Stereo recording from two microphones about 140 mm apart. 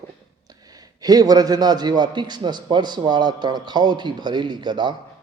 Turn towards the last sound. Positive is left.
turn(degrees=-35)  # may be behind; listen again after turning